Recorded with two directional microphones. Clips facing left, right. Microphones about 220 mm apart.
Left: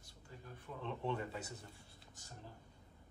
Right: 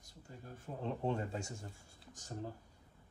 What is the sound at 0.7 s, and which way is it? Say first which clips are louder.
Speech: right 4 dB; 40° right (ahead or behind).